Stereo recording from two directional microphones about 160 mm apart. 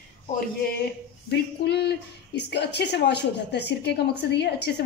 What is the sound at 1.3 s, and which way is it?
A woman's voice, 90° left.